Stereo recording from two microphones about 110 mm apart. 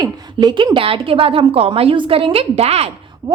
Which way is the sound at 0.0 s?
40° right (ahead or behind).